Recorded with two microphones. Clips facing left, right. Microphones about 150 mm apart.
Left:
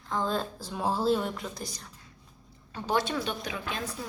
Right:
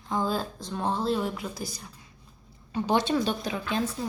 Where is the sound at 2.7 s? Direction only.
20° right (ahead or behind).